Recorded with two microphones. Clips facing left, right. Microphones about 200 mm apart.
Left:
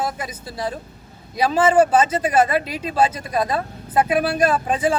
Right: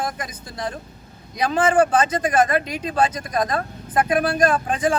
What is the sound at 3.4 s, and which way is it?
Speech, 5° left (ahead or behind).